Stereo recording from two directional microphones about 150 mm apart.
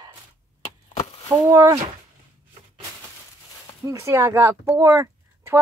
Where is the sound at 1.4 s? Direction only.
20° right (ahead or behind).